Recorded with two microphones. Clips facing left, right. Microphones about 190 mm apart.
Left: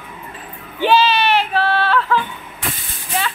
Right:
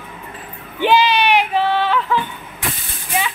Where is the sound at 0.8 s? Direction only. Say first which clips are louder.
Even; 15° right (ahead or behind).